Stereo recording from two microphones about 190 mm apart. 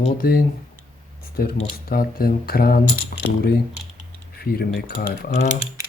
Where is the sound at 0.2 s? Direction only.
50° left (ahead or behind).